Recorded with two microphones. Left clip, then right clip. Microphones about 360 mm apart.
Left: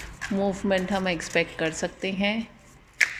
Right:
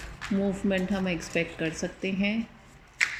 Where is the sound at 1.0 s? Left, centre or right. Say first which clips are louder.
Left 4 dB; left.